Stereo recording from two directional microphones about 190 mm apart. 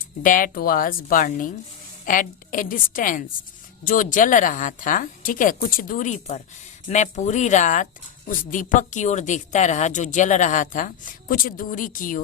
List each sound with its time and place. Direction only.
0.2 s a woman's voice: 45° left (ahead or behind)